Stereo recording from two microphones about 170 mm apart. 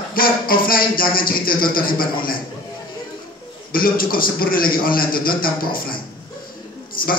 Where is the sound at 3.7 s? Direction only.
60° left (ahead or behind).